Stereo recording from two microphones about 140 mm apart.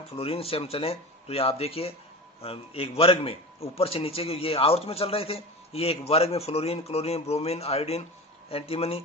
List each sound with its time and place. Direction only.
0.1 s a man's voice: 45° left (ahead or behind)